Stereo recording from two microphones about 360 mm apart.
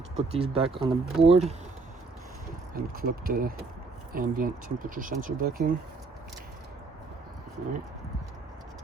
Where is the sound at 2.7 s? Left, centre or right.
Right.